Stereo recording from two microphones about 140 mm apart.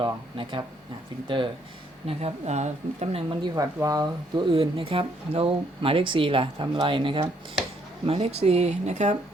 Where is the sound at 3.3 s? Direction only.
30° right (ahead or behind); by 9.2 s 55° right (ahead or behind).